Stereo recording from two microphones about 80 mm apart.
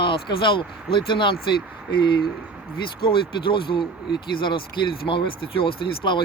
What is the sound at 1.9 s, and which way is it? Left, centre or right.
Speech, left.